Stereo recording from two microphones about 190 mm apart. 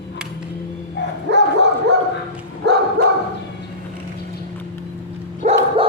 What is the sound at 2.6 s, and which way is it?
Dog, 60° right (ahead or behind).